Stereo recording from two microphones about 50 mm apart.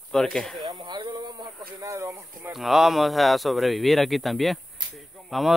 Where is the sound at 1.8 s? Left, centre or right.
Right.